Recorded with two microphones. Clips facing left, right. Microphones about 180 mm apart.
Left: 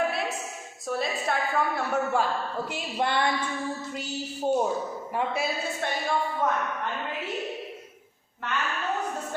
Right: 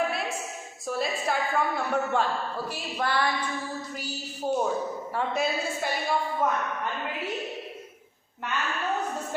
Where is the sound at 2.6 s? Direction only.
20° left (ahead or behind).